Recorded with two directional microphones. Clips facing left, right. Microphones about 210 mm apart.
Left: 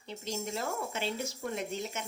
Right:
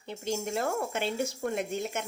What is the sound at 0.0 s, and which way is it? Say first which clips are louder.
Speech: right 5 dB; 55° right (ahead or behind).